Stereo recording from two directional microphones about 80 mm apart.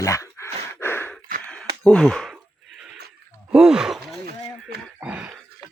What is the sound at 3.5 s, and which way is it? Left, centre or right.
Gasp, centre.